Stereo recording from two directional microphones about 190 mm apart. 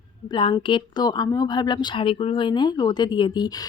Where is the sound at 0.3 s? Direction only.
25° left (ahead or behind).